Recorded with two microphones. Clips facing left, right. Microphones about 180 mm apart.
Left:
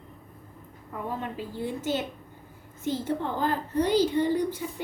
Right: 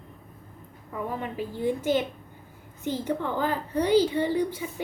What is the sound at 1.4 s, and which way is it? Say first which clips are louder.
A woman's voice: right 4 dB; 15° right (ahead or behind).